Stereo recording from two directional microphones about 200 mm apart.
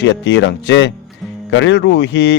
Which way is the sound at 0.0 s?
65° left (ahead or behind).